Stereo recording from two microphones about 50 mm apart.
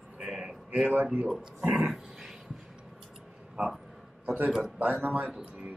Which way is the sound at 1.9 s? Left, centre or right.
Centre.